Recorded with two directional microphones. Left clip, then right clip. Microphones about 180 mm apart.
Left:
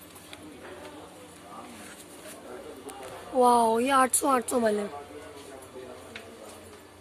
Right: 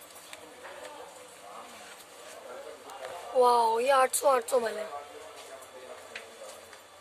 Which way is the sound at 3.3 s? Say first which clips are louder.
Left 2 dB; 10° left (ahead or behind).